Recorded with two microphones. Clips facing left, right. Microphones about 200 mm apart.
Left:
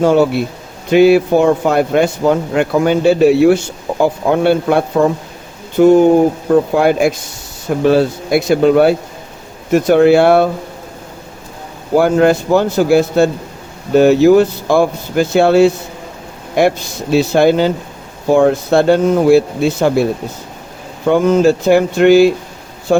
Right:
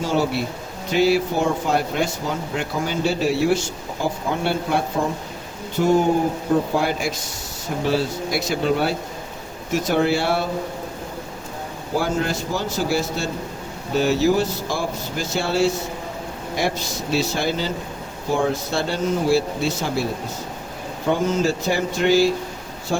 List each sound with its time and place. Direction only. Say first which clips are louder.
0.0 s speech: left 10 dB; 55° left (ahead or behind)
11.9 s speech: left 12 dB; 60° left (ahead or behind)
21.1 s speech: left 10 dB; 60° left (ahead or behind)